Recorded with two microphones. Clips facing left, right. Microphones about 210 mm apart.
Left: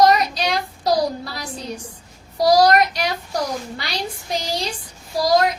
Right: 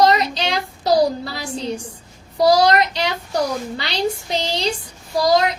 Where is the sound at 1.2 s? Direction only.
25° right (ahead or behind).